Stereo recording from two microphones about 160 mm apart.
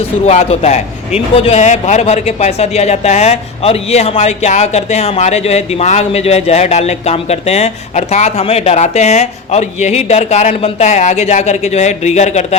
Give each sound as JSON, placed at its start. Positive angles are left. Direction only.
{"t": 0.3, "sound": "speech", "side_deg": 45}